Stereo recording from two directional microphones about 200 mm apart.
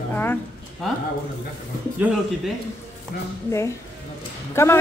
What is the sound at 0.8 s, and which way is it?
Speech, centre (ahead or behind).